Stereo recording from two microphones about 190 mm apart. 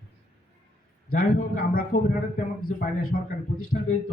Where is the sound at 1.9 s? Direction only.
40° left (ahead or behind).